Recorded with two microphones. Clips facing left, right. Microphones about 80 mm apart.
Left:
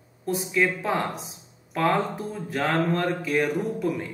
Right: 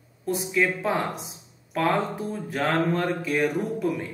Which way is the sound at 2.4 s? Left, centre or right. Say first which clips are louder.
Even; centre.